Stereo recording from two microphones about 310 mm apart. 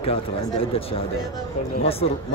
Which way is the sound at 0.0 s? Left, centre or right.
Centre.